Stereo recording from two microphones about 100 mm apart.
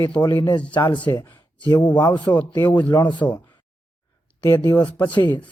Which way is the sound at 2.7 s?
15° left (ahead or behind).